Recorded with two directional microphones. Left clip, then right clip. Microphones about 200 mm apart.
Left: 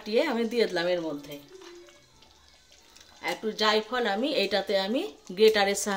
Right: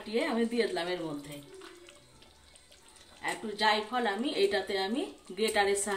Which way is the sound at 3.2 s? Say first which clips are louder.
Left 2 dB; 55° left (ahead or behind).